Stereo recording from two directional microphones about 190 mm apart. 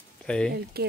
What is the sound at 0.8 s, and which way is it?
Speech, 55° right (ahead or behind).